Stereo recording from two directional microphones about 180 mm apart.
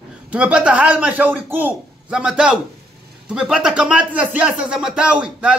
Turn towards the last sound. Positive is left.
turn(degrees=-5)  # may be behind; listen again after turning